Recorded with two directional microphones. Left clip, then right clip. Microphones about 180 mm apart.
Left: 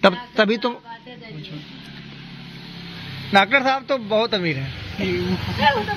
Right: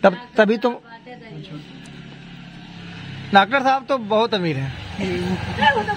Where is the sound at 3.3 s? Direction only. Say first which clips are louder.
Right 1 dB; 15° right (ahead or behind).